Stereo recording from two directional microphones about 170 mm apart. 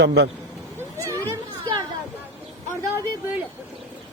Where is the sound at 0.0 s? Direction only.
90° right.